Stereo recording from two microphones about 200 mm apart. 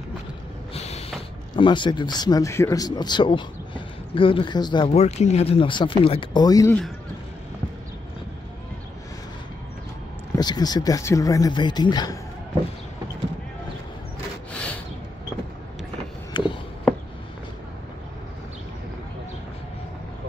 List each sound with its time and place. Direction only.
0.7 s mechanisms: 30° left (ahead or behind)
1.6 s speech: 25° left (ahead or behind)
10.3 s speech: 20° left (ahead or behind)
14.5 s snort: 5° left (ahead or behind)
16.3 s a sound: 20° left (ahead or behind)